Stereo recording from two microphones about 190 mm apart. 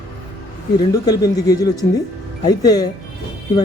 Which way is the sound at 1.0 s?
20° left (ahead or behind).